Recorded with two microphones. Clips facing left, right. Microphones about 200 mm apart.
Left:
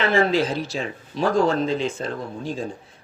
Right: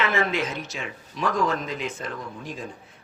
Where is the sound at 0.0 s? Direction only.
30° left (ahead or behind).